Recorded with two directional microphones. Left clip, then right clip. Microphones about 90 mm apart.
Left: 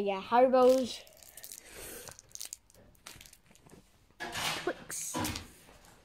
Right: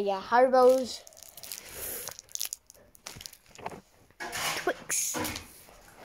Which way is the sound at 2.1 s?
35° right (ahead or behind).